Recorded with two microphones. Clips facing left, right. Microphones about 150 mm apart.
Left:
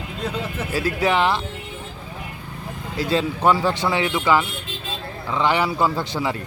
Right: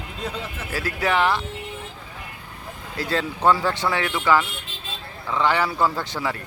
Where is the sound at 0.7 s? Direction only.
15° left (ahead or behind).